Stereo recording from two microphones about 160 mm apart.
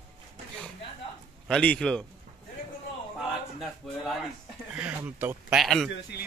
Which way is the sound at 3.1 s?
Centre (ahead or behind).